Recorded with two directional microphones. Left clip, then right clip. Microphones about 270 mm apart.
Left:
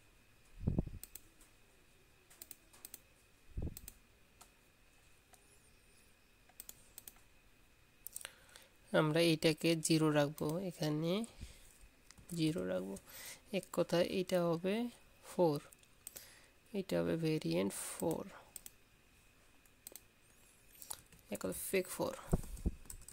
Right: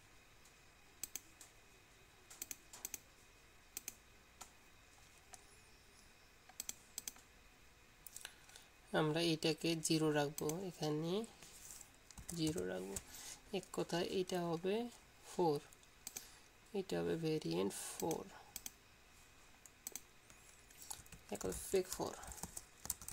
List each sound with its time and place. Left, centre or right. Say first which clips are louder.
6.5 s computer keyboard: right 8 dB; centre
8.2 s speech: left 2 dB; left
16.7 s speech: left 3 dB; left
20.9 s speech: left 2 dB; left